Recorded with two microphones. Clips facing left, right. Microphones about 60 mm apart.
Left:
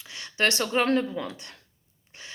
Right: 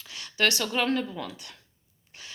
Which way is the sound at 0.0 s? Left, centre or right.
Left.